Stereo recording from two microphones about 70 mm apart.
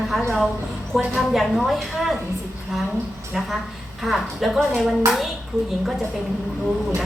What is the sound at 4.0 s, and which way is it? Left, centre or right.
A woman's voice, centre.